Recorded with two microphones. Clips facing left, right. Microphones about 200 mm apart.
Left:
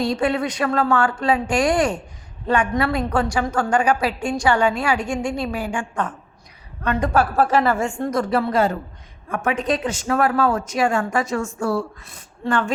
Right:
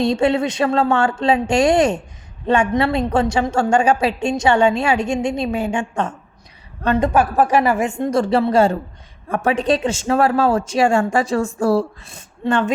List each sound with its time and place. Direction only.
0.0 s a woman's voice: 25° right (ahead or behind)
7.1 s a woman's voice: 15° right (ahead or behind)